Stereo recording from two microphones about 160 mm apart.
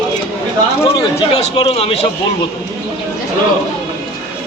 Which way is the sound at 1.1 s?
40° left (ahead or behind).